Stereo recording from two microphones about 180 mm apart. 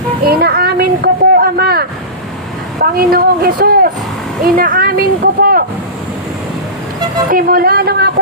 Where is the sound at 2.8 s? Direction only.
55° right (ahead or behind).